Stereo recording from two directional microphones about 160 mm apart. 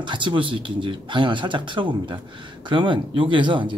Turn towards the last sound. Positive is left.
turn(degrees=-30)  # may be behind; listen again after turning